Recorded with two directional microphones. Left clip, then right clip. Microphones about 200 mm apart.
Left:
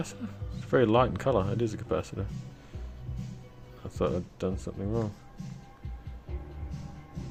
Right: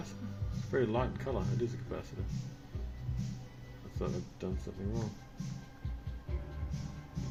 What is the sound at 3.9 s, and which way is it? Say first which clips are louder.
Speech: left 10 dB; 60° left (ahead or behind).